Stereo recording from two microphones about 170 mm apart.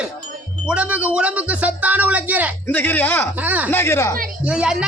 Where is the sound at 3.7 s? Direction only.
15° left (ahead or behind).